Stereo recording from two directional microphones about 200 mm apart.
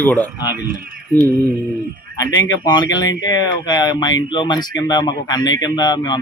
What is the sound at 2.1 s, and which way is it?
Speech, 15° left (ahead or behind).